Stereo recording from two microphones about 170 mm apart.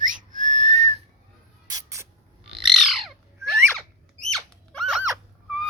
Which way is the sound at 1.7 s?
20° right (ahead or behind).